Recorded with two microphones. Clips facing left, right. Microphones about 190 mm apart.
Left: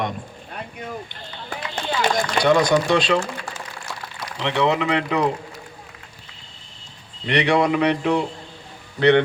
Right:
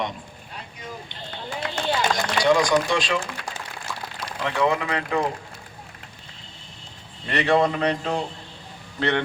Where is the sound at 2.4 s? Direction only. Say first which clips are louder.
Left 2 dB; 60° left (ahead or behind).